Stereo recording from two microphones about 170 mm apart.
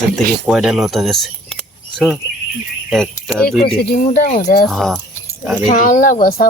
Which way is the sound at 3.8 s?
65° left (ahead or behind).